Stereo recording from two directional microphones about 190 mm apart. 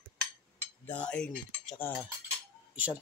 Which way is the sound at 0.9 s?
5° left (ahead or behind).